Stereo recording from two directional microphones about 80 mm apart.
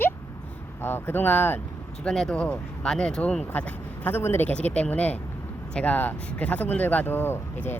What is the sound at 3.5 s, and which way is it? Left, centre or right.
Speech, left.